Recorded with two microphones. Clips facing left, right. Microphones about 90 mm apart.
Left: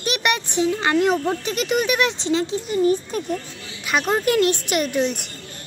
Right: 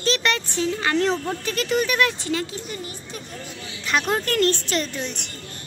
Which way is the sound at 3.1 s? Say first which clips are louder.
Left 10 dB; 45° left (ahead or behind).